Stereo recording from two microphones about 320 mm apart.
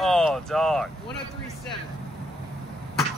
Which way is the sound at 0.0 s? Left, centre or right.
Centre.